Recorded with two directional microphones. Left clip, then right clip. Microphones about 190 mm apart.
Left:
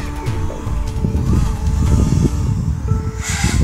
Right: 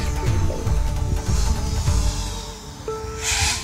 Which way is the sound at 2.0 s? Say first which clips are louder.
Left 8 dB; 35° left (ahead or behind).